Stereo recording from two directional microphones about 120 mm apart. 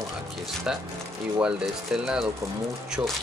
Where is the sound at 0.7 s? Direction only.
5° right (ahead or behind).